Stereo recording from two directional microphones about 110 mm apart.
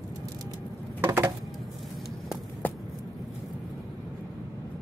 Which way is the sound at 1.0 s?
20° right (ahead or behind).